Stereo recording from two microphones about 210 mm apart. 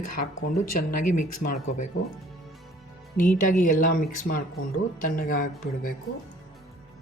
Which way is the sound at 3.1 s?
40° left (ahead or behind).